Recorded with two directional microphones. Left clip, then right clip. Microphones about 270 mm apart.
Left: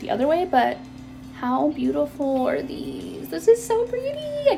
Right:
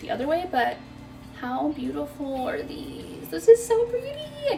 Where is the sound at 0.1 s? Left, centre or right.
Left.